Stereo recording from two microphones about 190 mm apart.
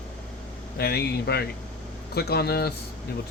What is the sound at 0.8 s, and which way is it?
Speech, 60° left (ahead or behind).